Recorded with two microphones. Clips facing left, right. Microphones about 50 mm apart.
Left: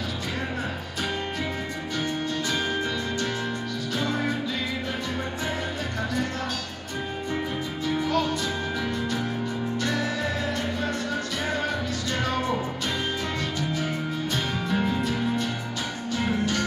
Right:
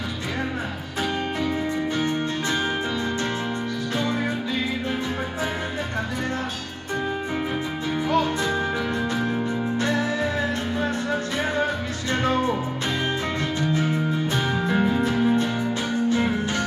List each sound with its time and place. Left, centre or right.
9.8 s music: right
12.1 s music: right
14.3 s music: right